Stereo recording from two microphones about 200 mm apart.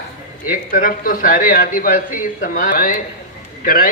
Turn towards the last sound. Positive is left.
turn(degrees=45)  # may be behind; listen again after turning